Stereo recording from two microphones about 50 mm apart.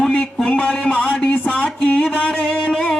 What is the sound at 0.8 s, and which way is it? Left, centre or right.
Speech, left.